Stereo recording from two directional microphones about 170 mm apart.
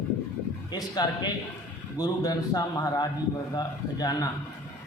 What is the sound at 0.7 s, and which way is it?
A man's voice, 25° left (ahead or behind).